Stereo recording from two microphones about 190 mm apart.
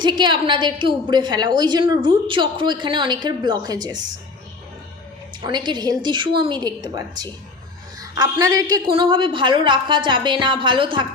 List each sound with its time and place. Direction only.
0.0 s a woman's voice: 25° right (ahead or behind)
5.4 s a woman's voice: 25° right (ahead or behind)